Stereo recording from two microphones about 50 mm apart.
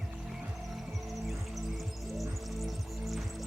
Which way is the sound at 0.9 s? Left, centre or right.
Centre.